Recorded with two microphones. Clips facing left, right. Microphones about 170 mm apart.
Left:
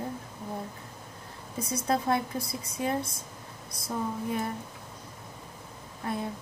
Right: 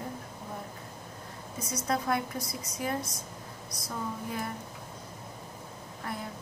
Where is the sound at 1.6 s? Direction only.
25° left (ahead or behind).